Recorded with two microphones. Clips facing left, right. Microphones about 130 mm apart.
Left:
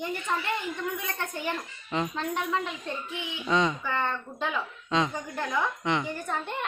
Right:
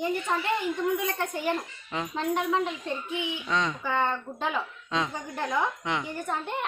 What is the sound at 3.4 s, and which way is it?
Speech, 5° left (ahead or behind).